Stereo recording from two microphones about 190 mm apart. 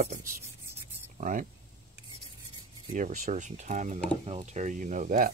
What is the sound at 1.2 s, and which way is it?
Speech, 40° right (ahead or behind).